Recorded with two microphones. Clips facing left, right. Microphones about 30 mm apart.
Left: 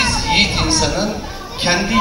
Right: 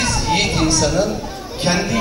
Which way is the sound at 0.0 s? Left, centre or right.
Left.